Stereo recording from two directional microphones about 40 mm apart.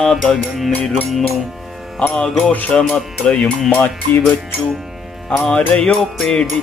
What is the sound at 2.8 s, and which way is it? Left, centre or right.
Music, centre.